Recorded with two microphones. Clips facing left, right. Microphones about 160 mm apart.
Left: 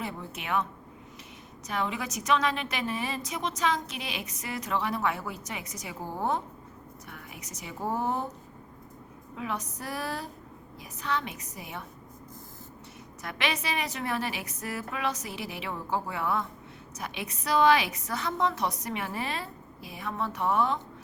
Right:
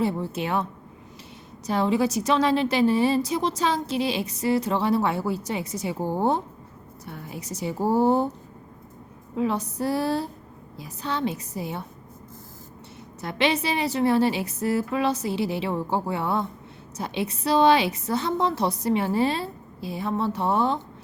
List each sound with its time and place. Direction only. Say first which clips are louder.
0.0 s a woman's voice: right 11 dB; 30° right (ahead or behind)
9.3 s a woman's voice: right 9 dB; 30° right (ahead or behind)
13.2 s a woman's voice: right 8 dB; 30° right (ahead or behind)